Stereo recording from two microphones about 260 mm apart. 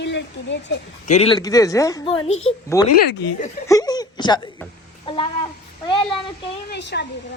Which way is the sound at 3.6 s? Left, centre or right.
Centre.